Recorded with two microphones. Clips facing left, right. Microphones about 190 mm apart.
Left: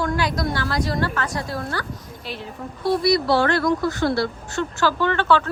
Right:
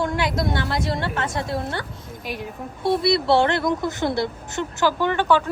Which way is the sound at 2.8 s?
25° right (ahead or behind).